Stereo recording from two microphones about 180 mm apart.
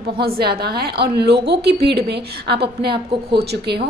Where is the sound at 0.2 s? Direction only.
60° right (ahead or behind).